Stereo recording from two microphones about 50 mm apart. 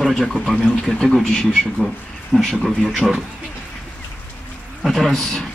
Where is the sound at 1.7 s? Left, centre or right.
Centre.